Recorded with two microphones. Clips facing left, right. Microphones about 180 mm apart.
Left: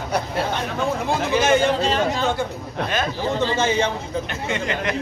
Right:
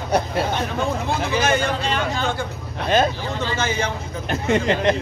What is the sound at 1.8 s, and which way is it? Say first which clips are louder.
Speech: left 3 dB; 35° left (ahead or behind).